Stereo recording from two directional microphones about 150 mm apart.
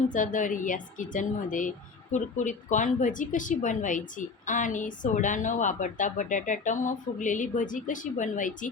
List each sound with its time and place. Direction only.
0.1 s a woman's voice: 60° left (ahead or behind)